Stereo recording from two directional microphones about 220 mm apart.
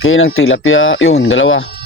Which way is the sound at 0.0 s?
60° left (ahead or behind).